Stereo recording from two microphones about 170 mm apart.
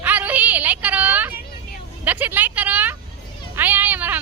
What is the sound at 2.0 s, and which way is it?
Speech, 10° right (ahead or behind).